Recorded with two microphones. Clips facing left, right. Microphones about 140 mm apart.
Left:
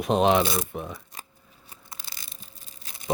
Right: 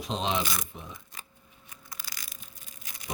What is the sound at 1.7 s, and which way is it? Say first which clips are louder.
Tearing: even; 25° left (ahead or behind).